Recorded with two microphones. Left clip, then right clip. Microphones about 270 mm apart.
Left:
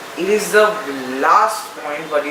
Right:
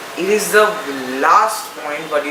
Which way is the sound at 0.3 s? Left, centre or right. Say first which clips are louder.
Even; centre.